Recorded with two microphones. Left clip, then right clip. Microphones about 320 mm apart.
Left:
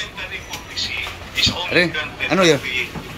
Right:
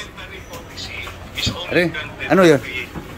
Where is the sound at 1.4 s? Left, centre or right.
Centre.